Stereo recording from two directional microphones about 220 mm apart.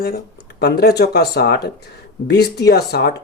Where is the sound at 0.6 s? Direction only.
50° left (ahead or behind).